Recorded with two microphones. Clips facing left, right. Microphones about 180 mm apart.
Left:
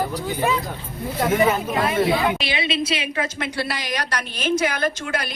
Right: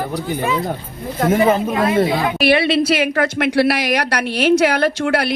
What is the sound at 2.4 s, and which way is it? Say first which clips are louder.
Speech: right 10 dB; 65° right (ahead or behind).